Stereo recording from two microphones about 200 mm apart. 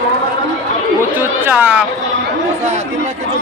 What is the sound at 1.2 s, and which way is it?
Chatter, 10° right (ahead or behind).